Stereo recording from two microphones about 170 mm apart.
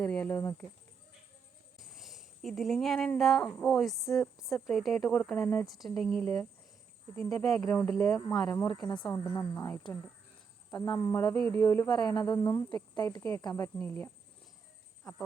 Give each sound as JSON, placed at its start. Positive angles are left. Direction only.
{"t": 0.0, "sound": "speech", "side_deg": 5}
{"t": 1.8, "sound": "speech", "side_deg": 0}
{"t": 10.7, "sound": "speech", "side_deg": 25}